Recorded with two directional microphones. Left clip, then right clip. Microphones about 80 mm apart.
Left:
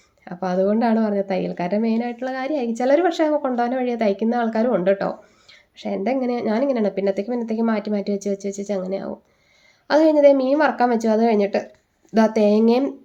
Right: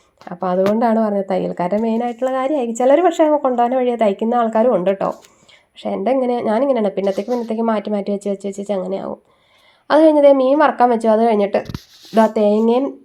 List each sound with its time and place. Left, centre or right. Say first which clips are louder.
0.3 s speech: right 4 dB; centre
0.8 s a woman's voice: right 4 dB; right
1.9 s speech: right 6 dB; right
3.4 s a woman's voice: right 6 dB; right
5.7 s a woman's voice: right 5 dB; centre
12.1 s speech: right 3 dB; centre